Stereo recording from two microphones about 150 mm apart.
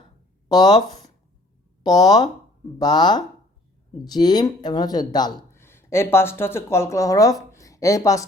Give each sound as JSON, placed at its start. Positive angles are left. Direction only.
{"t": 0.4, "sound": "speech", "side_deg": 25}
{"t": 0.9, "sound": "a sound", "side_deg": 25}
{"t": 1.8, "sound": "speech", "side_deg": 25}
{"t": 5.5, "sound": "speech", "side_deg": 15}